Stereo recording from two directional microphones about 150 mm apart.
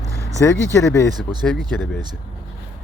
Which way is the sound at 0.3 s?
20° left (ahead or behind).